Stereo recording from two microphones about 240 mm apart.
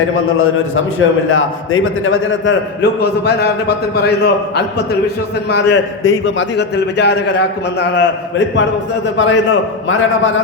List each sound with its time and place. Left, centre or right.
0.0 s a man's voice: left